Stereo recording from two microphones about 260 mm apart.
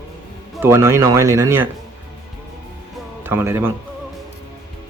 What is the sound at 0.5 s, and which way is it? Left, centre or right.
Speech, centre.